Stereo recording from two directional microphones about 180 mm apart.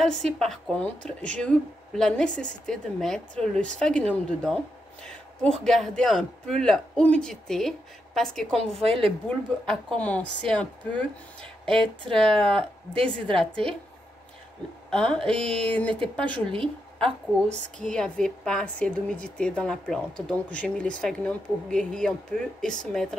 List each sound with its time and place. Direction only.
0.0 s speech: centre (ahead or behind)
8.7 s a woman's voice: 30° right (ahead or behind)
9.3 s a woman's voice: 5° left (ahead or behind)
12.1 s speech: 5° left (ahead or behind)
14.9 s a woman's voice: 5° left (ahead or behind)
17.0 s a woman's voice: 40° right (ahead or behind)
17.8 s speech: 5° left (ahead or behind)